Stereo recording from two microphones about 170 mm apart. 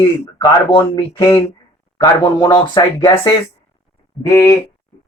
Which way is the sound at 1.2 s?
15° left (ahead or behind).